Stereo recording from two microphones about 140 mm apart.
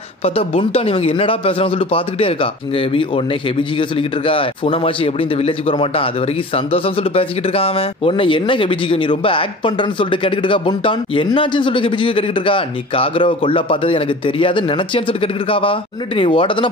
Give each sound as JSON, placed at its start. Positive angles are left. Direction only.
{"t": 0.2, "sound": "speech", "side_deg": 45}
{"t": 4.3, "sound": "speech", "side_deg": 40}